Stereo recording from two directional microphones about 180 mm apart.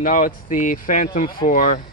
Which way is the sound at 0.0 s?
50° left (ahead or behind).